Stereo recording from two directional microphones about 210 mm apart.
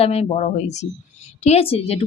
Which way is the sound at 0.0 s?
30° left (ahead or behind).